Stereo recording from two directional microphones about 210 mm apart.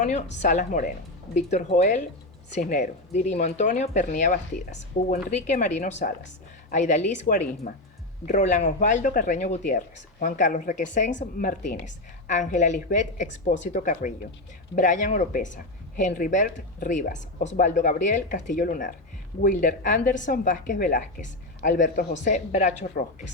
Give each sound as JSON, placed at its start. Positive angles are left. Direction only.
{"t": 0.0, "sound": "speech", "side_deg": 35}
{"t": 11.1, "sound": "speech", "side_deg": 55}
{"t": 11.4, "sound": "speech", "side_deg": 40}